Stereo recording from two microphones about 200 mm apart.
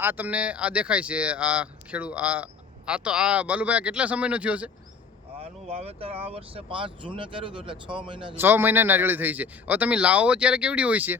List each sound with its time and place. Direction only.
0.0 s speech: 10° right (ahead or behind)
5.4 s speech: 30° right (ahead or behind)
8.4 s speech: 10° right (ahead or behind)